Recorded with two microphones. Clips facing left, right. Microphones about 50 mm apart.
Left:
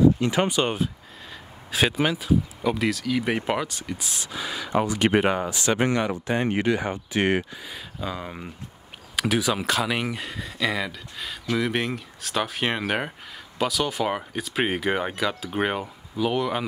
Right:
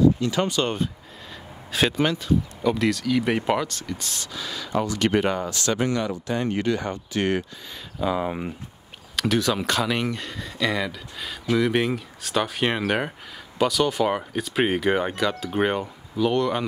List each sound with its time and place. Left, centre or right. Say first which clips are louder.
0.2 s speech: left 1 dB; left
1.7 s speech: right 1 dB; centre
5.8 s speech: left 1 dB; left
8.0 s speech: right 8 dB; centre
9.1 s speech: right 1 dB; centre